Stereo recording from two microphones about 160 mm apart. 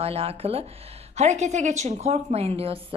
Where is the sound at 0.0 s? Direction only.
35° right (ahead or behind).